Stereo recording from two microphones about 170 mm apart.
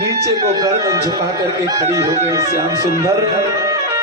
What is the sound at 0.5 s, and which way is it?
Speech, 20° right (ahead or behind).